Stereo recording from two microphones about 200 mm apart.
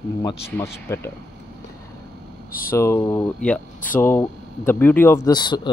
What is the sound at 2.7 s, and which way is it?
Speech, 15° left (ahead or behind).